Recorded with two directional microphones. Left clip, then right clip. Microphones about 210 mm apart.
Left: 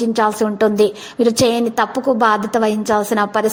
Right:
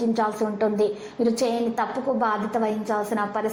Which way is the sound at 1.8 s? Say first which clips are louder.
Left 11 dB; 50° left (ahead or behind).